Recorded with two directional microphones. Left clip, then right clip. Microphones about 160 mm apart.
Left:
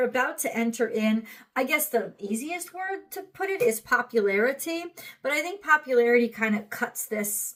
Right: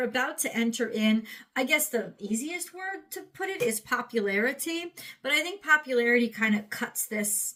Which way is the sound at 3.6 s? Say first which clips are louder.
Left 6 dB; 30° right (ahead or behind).